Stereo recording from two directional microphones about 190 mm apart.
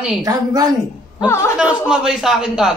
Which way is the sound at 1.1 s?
15° left (ahead or behind).